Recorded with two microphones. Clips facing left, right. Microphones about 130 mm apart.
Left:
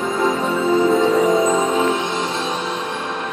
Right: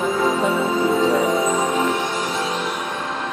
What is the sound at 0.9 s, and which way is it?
Music, 5° right (ahead or behind).